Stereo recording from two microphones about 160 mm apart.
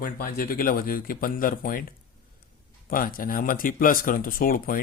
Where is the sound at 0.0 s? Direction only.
65° left (ahead or behind).